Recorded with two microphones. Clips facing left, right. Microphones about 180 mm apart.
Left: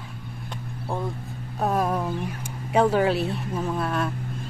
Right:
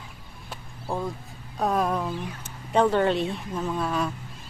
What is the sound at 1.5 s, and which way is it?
Speech, 5° left (ahead or behind).